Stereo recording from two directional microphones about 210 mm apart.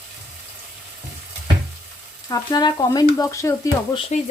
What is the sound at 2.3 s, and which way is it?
Speech, 20° left (ahead or behind).